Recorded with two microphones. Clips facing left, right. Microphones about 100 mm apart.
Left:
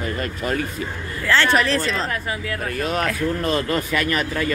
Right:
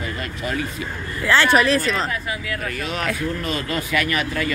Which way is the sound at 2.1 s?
40° left (ahead or behind).